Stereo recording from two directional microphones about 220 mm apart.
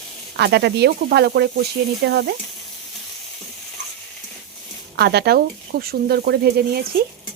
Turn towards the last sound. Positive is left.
turn(degrees=-45)  # may be behind; listen again after turning